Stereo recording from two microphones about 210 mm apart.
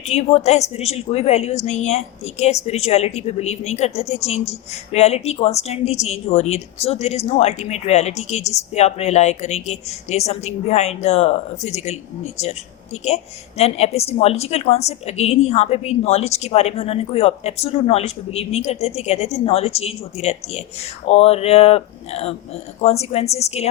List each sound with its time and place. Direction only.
0.0 s a woman's voice: 30° left (ahead or behind)